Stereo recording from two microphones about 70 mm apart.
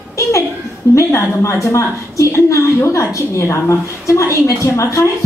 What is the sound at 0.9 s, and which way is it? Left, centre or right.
A woman's voice, left.